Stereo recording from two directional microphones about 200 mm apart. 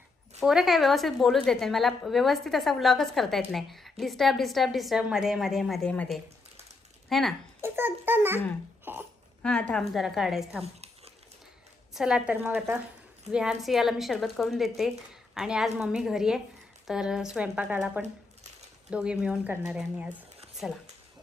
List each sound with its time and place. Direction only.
0.3 s a woman's voice: centre (ahead or behind)
7.6 s a child's voice: 10° right (ahead or behind)
8.8 s a sound: 10° right (ahead or behind)
9.4 s a woman's voice: 5° left (ahead or behind)
10.6 s a sound: 30° right (ahead or behind)
11.9 s a woman's voice: 5° right (ahead or behind)